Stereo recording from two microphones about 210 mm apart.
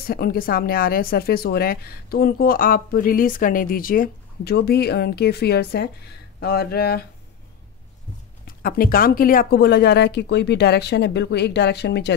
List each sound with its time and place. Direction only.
0.0 s a woman's voice: 45° left (ahead or behind)
8.5 s a woman's voice: 45° left (ahead or behind)